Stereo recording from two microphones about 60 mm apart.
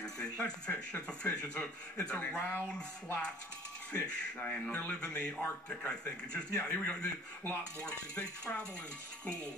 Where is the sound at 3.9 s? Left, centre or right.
Centre.